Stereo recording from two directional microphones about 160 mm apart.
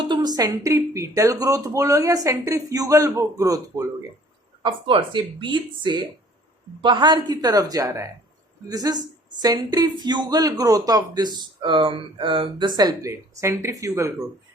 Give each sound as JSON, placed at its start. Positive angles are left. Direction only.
{"t": 0.0, "sound": "speech", "side_deg": -30}